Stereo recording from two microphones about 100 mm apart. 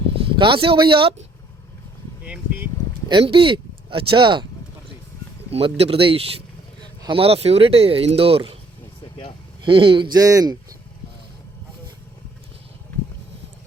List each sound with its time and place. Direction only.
0.3 s speech: 55° right (ahead or behind)
2.2 s speech: 10° right (ahead or behind)
3.1 s speech: 55° right (ahead or behind)
5.5 s speech: 80° right
9.6 s speech: 60° right (ahead or behind)
10.2 s speech: 35° right (ahead or behind)